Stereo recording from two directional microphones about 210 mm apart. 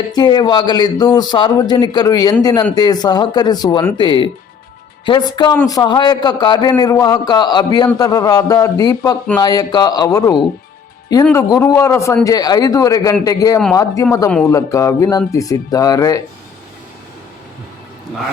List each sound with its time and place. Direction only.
0.1 s a man's voice: 20° left (ahead or behind)